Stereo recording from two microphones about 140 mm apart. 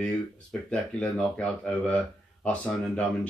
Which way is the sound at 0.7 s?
10° left (ahead or behind).